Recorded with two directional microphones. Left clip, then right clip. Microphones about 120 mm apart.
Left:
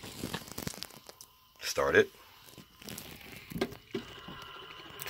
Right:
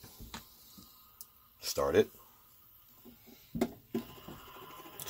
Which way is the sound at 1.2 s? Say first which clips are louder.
Left 3 dB; 5° right (ahead or behind).